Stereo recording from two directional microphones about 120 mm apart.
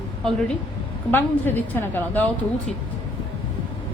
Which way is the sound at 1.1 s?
15° left (ahead or behind).